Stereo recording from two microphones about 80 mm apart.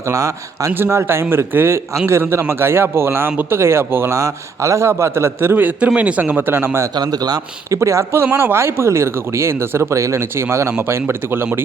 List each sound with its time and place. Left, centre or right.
0.0 s a man's voice: right
6.9 s a man's voice: right
7.8 s speech: right